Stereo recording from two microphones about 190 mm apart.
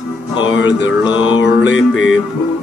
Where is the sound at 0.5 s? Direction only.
75° left (ahead or behind).